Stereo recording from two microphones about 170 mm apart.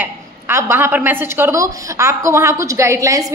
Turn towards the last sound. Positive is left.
turn(degrees=-15)  # may be behind; listen again after turning